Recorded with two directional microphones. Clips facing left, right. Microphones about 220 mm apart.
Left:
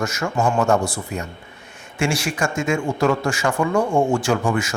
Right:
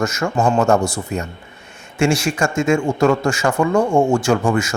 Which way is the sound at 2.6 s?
45° right (ahead or behind).